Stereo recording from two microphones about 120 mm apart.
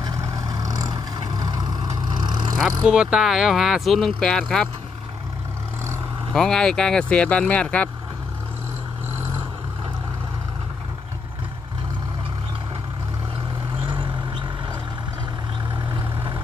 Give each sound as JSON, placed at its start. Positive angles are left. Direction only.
{"t": 0.0, "sound": "vehicle", "side_deg": -30}
{"t": 2.8, "sound": "speech", "side_deg": -5}
{"t": 6.3, "sound": "speech", "side_deg": 5}
{"t": 13.8, "sound": "vehicle", "side_deg": -40}